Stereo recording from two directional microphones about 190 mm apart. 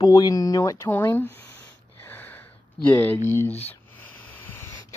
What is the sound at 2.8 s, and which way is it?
Speech, 10° left (ahead or behind).